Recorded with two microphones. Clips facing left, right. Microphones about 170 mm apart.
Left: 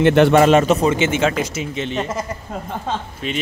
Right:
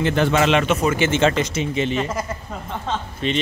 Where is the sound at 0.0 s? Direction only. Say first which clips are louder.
Left 7 dB; 65° left (ahead or behind).